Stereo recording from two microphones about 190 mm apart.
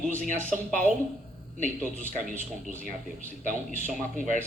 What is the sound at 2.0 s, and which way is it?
A woman's voice, 40° right (ahead or behind).